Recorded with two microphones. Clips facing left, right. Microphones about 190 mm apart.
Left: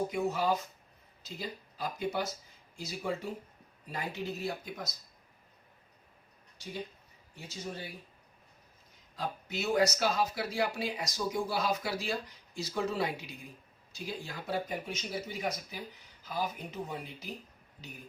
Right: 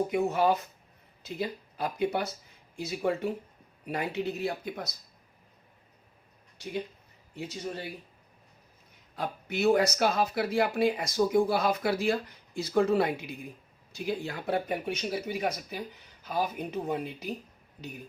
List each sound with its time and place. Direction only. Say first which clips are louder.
0.1 s speech: right 5 dB; 60° right (ahead or behind)
9.1 s speech: right 4 dB; 60° right (ahead or behind)